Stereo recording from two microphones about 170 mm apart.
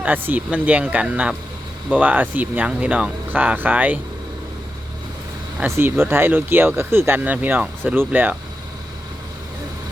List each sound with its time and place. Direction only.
0.0 s speech: 10° right (ahead or behind)
5.5 s speech: 15° right (ahead or behind)